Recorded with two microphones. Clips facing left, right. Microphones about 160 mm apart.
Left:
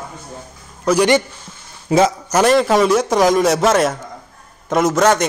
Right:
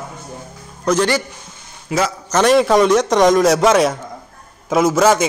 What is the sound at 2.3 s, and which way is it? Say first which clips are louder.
A man's voice: right 1 dB; 5° left (ahead or behind).